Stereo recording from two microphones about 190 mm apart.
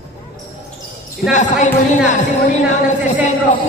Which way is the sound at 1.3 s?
40° left (ahead or behind).